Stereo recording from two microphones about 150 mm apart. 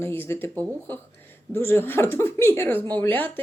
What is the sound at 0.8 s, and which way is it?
Speech, 15° left (ahead or behind).